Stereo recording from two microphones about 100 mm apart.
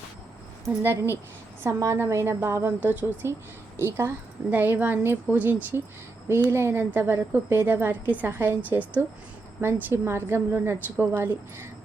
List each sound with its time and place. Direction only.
0.8 s a woman's voice: 25° right (ahead or behind)